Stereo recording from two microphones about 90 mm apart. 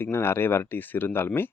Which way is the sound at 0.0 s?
25° left (ahead or behind).